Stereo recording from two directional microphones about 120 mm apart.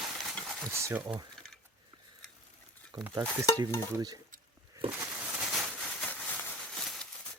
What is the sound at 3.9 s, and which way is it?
Stir, 30° right (ahead or behind).